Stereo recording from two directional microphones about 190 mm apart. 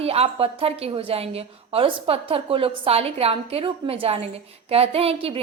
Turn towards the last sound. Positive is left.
turn(degrees=-30)  # may be behind; listen again after turning